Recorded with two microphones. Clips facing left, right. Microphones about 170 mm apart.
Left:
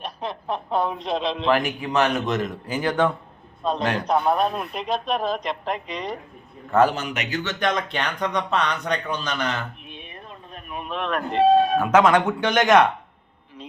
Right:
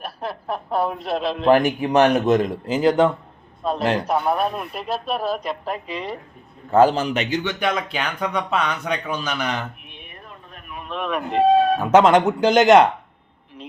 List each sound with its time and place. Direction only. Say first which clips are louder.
0.0 s speech: right 1 dB; 5° right (ahead or behind)
1.5 s a man's voice: right 7 dB; 45° right (ahead or behind)
2.1 s speech: right 7 dB; 35° right (ahead or behind)
3.6 s a man's voice: right 2 dB; 5° right (ahead or behind)
6.7 s speech: right 4 dB; 30° right (ahead or behind)
7.6 s speech: right 1 dB; 5° right (ahead or behind)
10.0 s a sound: right 1 dB; 25° left (ahead or behind)
10.8 s speech: right 1 dB; centre (ahead or behind)
11.8 s speech: right 3 dB; 25° right (ahead or behind)